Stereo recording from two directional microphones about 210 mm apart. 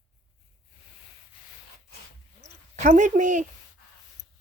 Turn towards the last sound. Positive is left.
turn(degrees=-35)  # may be behind; listen again after turning